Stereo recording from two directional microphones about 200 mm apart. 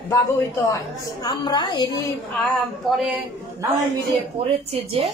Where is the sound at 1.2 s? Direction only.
20° left (ahead or behind).